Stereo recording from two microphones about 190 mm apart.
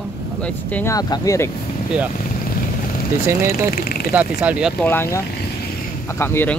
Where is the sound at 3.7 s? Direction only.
55° left (ahead or behind).